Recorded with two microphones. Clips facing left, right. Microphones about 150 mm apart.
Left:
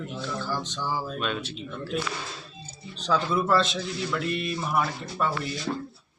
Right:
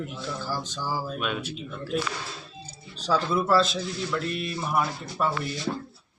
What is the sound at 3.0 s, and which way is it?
A man's voice, 5° right (ahead or behind).